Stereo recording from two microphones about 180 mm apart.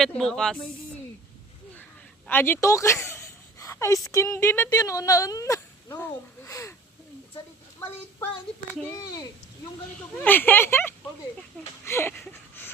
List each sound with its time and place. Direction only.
0.0 s speech: centre (ahead or behind)
2.2 s speech: 10° left (ahead or behind)
10.2 s speech: 10° left (ahead or behind)
11.9 s a sound: 15° left (ahead or behind)